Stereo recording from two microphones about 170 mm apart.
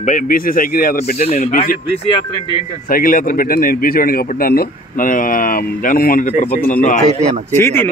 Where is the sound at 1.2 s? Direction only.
40° left (ahead or behind).